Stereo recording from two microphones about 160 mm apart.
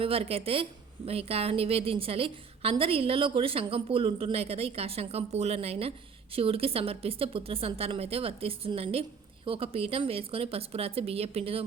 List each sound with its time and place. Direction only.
0.0 s a woman's voice: 35° right (ahead or behind)